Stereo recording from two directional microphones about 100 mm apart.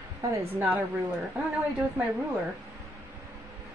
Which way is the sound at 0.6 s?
15° right (ahead or behind).